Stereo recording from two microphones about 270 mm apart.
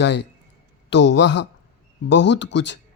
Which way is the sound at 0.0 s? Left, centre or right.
Left.